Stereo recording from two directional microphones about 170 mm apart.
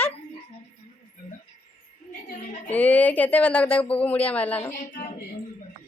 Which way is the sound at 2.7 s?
10° left (ahead or behind).